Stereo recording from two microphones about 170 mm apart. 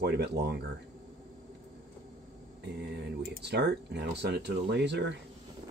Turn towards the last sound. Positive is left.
turn(degrees=-90)